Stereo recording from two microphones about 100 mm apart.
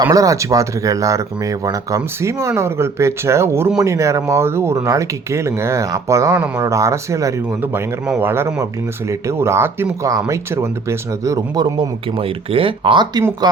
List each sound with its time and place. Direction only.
0.0 s speech: 35° right (ahead or behind)
7.6 s speech: 20° right (ahead or behind); by 11.9 s 45° right (ahead or behind)
12.1 s speech: 70° right (ahead or behind)
13.4 s speech: 40° right (ahead or behind)